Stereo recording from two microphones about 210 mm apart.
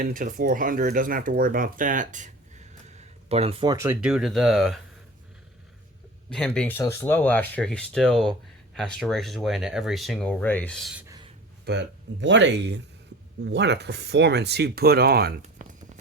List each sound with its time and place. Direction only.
0.0 s speech: 40° right (ahead or behind); by 4.8 s centre (ahead or behind)
6.3 s speech: 5° left (ahead or behind)
11.6 s speech: 55° right (ahead or behind)
15.6 s a sound: 35° right (ahead or behind)